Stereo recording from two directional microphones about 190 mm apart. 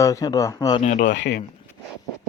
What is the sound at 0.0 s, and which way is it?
Speech, 15° left (ahead or behind).